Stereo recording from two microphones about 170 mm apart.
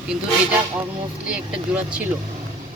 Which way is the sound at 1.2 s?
5° right (ahead or behind).